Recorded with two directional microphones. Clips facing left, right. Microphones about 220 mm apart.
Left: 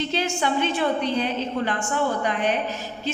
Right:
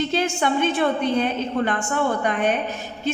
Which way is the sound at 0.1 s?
50° right (ahead or behind).